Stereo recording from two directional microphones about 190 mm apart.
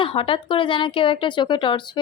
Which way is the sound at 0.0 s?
30° left (ahead or behind).